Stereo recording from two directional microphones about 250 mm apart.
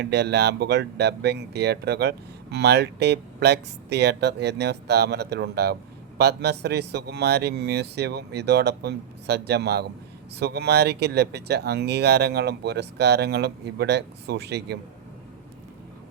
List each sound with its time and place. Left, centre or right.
0.0 s speech: right